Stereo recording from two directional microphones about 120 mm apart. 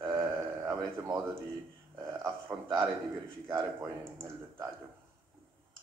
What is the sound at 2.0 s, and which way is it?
A man's voice, 25° right (ahead or behind).